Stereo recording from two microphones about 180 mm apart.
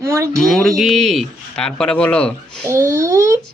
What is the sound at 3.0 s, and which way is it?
Speech, 15° right (ahead or behind).